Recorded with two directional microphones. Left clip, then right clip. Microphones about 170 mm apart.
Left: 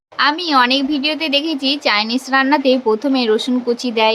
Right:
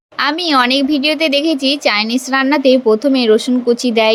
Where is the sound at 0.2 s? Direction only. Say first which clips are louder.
Right 1 dB; 25° right (ahead or behind).